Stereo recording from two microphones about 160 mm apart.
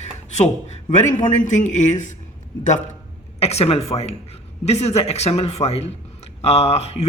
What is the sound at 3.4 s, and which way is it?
A woman's voice, 40° left (ahead or behind).